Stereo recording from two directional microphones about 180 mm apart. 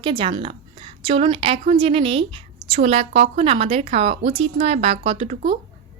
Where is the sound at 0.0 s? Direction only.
30° right (ahead or behind).